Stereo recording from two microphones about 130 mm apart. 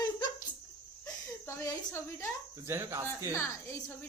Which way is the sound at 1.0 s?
25° left (ahead or behind).